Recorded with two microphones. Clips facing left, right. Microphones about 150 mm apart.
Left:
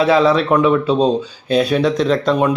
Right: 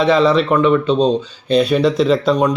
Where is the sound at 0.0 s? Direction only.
5° left (ahead or behind).